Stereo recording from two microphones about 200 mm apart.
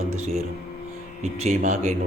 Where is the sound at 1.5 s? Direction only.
35° right (ahead or behind).